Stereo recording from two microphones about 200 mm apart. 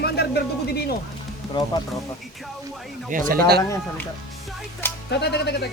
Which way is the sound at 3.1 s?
40° right (ahead or behind).